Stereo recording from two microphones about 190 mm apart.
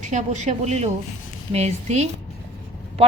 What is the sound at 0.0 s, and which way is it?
A woman's voice, 40° right (ahead or behind).